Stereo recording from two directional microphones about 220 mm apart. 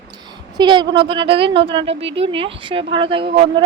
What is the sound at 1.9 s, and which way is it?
Speech, 55° right (ahead or behind).